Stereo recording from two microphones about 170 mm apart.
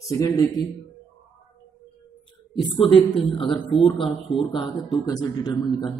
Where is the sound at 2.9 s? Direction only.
30° left (ahead or behind).